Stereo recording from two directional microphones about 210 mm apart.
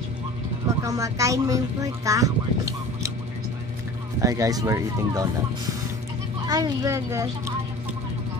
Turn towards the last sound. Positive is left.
turn(degrees=-15)  # may be behind; listen again after turning